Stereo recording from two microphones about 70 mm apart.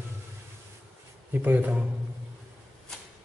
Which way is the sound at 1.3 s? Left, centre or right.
Right.